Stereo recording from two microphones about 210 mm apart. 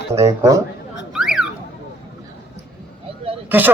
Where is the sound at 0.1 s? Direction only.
15° right (ahead or behind).